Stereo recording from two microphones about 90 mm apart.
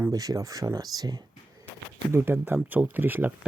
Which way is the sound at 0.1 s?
40° right (ahead or behind).